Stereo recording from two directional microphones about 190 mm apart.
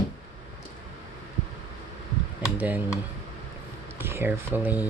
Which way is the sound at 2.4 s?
10° right (ahead or behind).